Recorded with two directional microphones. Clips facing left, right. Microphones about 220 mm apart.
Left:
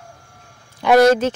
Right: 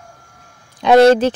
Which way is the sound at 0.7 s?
25° right (ahead or behind).